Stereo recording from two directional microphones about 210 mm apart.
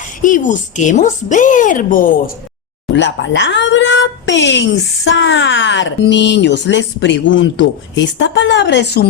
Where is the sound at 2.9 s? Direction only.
60° left (ahead or behind).